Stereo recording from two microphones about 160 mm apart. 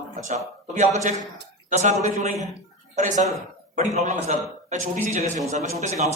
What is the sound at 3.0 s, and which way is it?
A man's voice, 50° right (ahead or behind).